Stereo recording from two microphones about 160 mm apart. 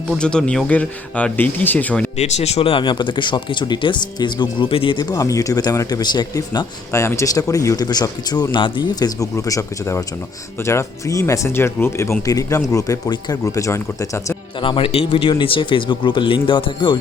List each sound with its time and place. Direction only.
0.2 s speech: 5° left (ahead or behind)
2.1 s speech: 40° left (ahead or behind); by 14.3 s 20° left (ahead or behind)
14.6 s speech: 35° left (ahead or behind)